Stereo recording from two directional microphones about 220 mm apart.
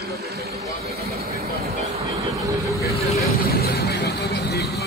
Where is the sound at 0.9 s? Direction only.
45° right (ahead or behind).